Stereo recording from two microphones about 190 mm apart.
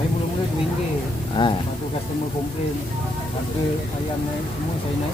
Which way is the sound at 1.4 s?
25° left (ahead or behind).